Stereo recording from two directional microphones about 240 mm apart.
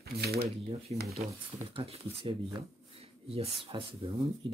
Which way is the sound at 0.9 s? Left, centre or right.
Right.